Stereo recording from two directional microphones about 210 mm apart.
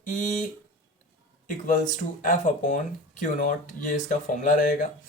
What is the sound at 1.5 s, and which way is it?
Speech, 35° left (ahead or behind).